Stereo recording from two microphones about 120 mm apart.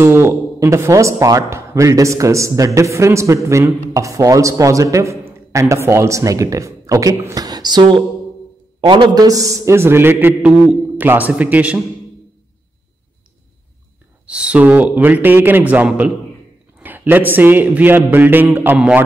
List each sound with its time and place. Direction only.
0.0 s a man's voice: 20° right (ahead or behind)
14.2 s a man's voice: 10° right (ahead or behind)